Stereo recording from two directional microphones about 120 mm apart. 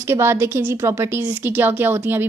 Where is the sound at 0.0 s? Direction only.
20° right (ahead or behind).